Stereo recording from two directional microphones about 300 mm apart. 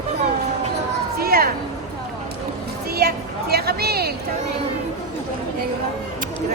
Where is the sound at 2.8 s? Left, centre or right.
Right.